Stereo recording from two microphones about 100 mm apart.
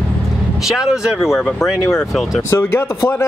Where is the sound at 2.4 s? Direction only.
25° left (ahead or behind).